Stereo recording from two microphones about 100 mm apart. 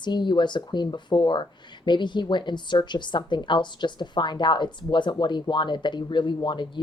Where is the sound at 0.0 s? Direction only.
50° left (ahead or behind).